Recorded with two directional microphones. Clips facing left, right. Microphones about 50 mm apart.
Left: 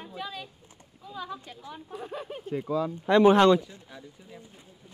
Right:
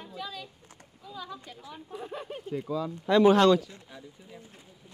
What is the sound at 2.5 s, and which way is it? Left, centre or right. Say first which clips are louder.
Speech: left 3 dB; left.